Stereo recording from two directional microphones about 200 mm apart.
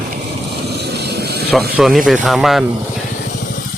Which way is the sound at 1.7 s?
Centre (ahead or behind).